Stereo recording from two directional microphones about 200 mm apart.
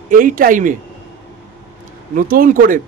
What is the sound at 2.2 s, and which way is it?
Speech, 45° right (ahead or behind).